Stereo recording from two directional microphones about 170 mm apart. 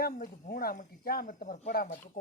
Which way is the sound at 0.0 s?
55° left (ahead or behind).